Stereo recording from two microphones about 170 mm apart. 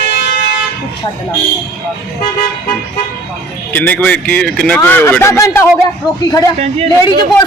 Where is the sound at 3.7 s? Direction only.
10° left (ahead or behind).